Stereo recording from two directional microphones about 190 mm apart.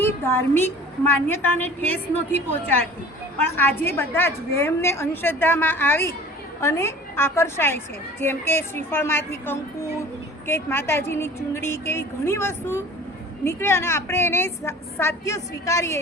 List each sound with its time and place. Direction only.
0.0 s a woman's voice: 10° left (ahead or behind)